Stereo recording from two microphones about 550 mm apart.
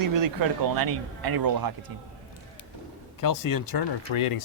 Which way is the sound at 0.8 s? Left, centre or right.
Right.